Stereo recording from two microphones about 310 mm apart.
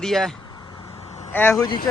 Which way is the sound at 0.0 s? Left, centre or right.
Centre.